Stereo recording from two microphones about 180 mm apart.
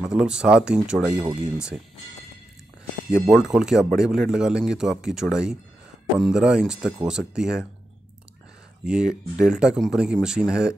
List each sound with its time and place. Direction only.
0.0 s speech: 5° right (ahead or behind)
3.1 s speech: 5° right (ahead or behind)
8.8 s speech: 5° right (ahead or behind)